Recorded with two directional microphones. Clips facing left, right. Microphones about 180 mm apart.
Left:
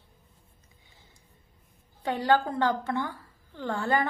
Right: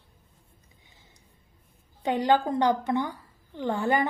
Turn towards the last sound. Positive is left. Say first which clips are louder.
# right 2 dB
turn(degrees=-15)  # may be behind; listen again after turning